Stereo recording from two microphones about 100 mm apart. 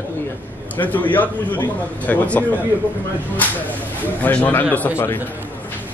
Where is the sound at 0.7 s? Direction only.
15° left (ahead or behind).